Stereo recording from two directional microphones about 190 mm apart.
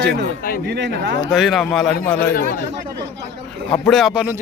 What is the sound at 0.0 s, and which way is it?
Speech, 60° right (ahead or behind).